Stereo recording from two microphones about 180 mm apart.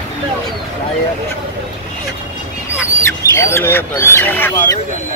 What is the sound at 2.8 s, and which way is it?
Speech, 15° left (ahead or behind).